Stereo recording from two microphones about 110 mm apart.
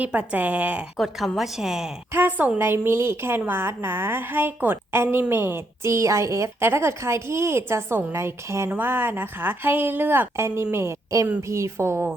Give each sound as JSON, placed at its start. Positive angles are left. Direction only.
{"t": 0.0, "sound": "speech", "side_deg": -10}
{"t": 0.9, "sound": "a woman's voice", "side_deg": 0}
{"t": 2.1, "sound": "a woman's voice", "side_deg": -20}